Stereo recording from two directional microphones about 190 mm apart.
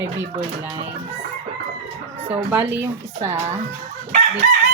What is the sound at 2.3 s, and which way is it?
Speech, 10° right (ahead or behind).